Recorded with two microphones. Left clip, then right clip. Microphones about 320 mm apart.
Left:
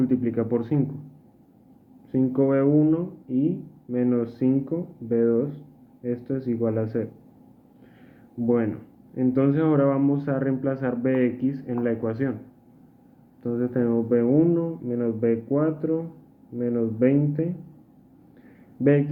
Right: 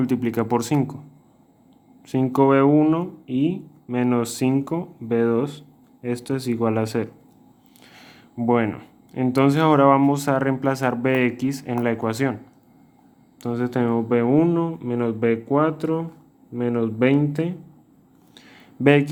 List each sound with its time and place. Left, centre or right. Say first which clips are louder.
0.0 s speech: right 1 dB; right
2.0 s speech: right 4 dB; right
8.4 s speech: right 3 dB; right
13.4 s speech: right 2 dB; right
18.8 s speech: right 4 dB; right